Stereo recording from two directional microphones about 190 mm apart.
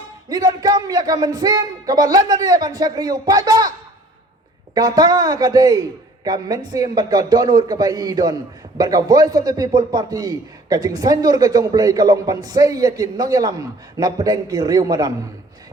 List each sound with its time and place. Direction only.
0.3 s a man's voice: 20° right (ahead or behind)
4.7 s a man's voice: 20° right (ahead or behind)